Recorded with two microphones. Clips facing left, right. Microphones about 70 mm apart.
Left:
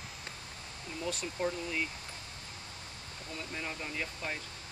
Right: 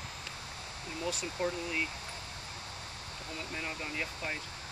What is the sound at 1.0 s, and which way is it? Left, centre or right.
Speech, centre.